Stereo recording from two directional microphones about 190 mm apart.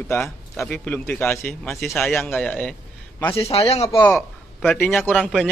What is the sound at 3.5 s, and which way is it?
Speech, 30° left (ahead or behind).